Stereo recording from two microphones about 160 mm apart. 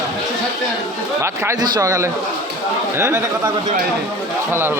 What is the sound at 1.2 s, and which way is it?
A man's voice, 20° right (ahead or behind).